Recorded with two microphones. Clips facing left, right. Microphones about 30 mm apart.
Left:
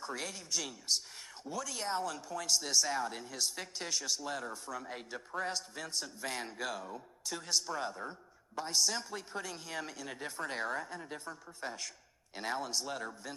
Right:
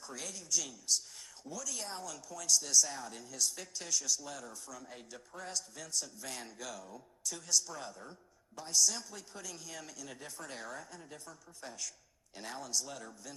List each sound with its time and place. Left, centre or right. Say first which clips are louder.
0.0 s a woman's voice: left 5 dB; left